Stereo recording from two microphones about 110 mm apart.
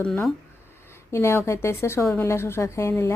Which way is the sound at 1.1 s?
25° left (ahead or behind).